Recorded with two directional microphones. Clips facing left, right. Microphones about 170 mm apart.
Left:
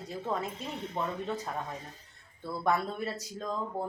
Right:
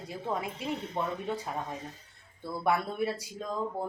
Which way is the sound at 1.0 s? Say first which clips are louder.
Even; 15° right (ahead or behind).